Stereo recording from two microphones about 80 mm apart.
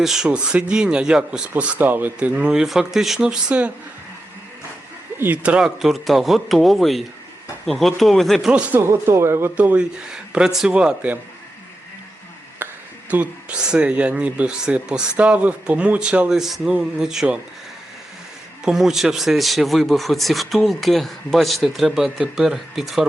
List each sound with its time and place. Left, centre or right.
0.0 s speech: centre
5.1 s speech: right
5.4 s speech: centre
8.5 s speech: centre
8.8 s speech: right
9.6 s speech: centre
12.6 s a sound: right
13.1 s speech: centre
18.6 s speech: centre